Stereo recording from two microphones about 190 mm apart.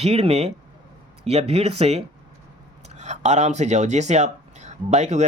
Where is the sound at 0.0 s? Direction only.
30° right (ahead or behind).